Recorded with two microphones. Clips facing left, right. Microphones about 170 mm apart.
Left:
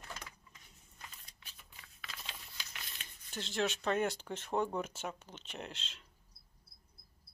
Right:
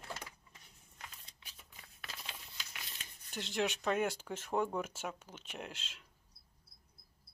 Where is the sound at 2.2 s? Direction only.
5° right (ahead or behind).